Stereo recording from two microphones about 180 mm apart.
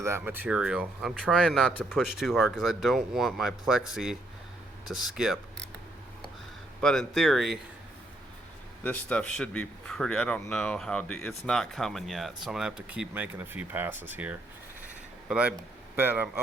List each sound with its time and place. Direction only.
0.0 s a man's voice: 15° right (ahead or behind)
6.8 s a man's voice: centre (ahead or behind)
8.8 s a man's voice: 5° left (ahead or behind); by 13.9 s 10° right (ahead or behind)
15.3 s a man's voice: 5° right (ahead or behind)